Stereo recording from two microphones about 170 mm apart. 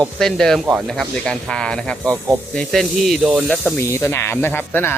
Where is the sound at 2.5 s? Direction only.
Centre (ahead or behind).